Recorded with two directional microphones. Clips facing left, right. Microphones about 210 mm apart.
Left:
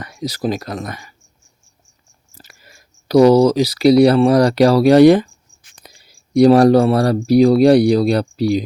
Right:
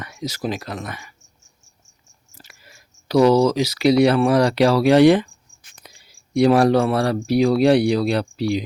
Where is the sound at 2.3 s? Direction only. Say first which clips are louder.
Left 2 dB; 40° left (ahead or behind).